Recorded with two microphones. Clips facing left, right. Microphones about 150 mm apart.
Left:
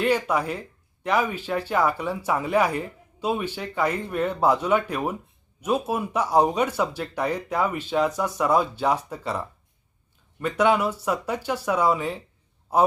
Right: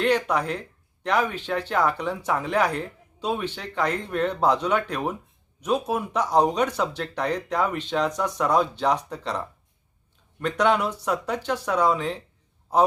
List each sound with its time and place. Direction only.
0.0 s a man's voice: 5° left (ahead or behind)